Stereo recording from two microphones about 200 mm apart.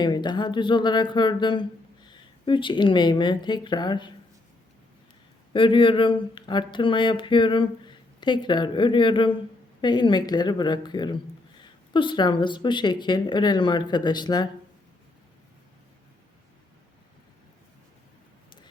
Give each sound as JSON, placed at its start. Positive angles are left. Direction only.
{"t": 0.0, "sound": "speech", "side_deg": 20}
{"t": 5.5, "sound": "speech", "side_deg": 25}